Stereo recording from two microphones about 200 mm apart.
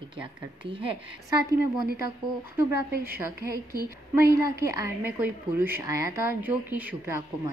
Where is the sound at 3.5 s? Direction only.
50° right (ahead or behind).